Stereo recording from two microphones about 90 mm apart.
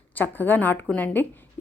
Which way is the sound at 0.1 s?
20° left (ahead or behind).